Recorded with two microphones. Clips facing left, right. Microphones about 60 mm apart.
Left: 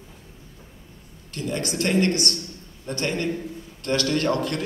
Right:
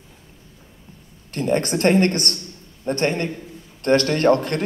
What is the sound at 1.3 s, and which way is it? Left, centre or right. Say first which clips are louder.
A man's voice: right 7 dB; right.